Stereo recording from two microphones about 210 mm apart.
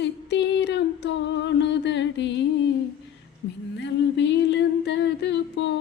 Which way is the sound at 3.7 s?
55° left (ahead or behind).